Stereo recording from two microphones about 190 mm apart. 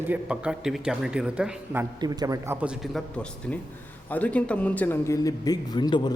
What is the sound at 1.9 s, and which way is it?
Speech, 20° right (ahead or behind).